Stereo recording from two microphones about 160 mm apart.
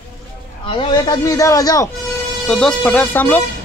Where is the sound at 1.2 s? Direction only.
20° left (ahead or behind).